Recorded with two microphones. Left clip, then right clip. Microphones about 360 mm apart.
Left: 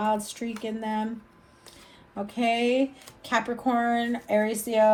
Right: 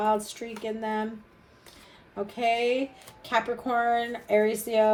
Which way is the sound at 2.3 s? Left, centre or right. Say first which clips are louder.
Left 1 dB; centre.